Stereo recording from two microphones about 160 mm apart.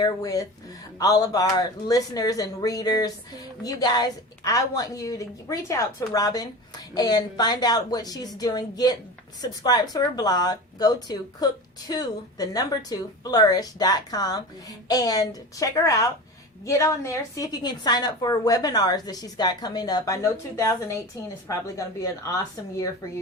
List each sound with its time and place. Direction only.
0.0 s speech: 20° left (ahead or behind)